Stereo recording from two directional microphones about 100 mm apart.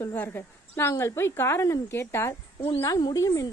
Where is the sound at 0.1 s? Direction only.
20° left (ahead or behind).